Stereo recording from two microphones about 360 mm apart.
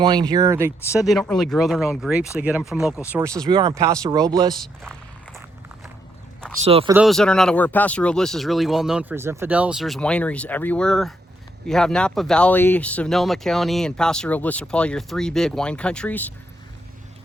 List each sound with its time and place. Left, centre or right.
0.0 s speech: centre
0.8 s speech: centre
4.5 s a sound: centre
6.7 s speech: centre
6.9 s speech: centre